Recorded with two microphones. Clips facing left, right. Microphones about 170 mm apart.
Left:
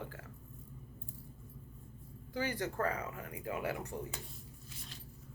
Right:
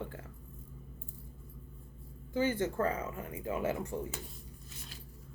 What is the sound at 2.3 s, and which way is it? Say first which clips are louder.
Speech: right 6 dB; 25° right (ahead or behind).